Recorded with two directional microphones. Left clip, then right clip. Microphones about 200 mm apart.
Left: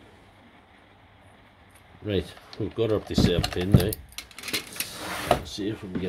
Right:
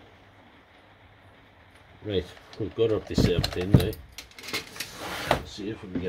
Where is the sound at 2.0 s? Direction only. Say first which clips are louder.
Left 1 dB; 30° left (ahead or behind).